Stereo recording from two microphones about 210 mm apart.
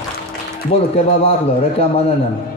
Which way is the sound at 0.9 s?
30° left (ahead or behind).